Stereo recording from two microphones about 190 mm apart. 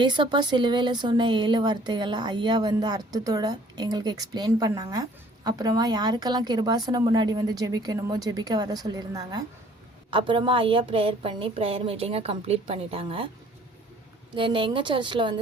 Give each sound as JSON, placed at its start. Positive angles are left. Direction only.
{"t": 0.0, "sound": "speech", "side_deg": -25}
{"t": 14.3, "sound": "speech", "side_deg": -25}